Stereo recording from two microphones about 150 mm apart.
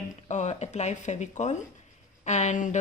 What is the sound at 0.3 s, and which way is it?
A woman's voice, 50° left (ahead or behind).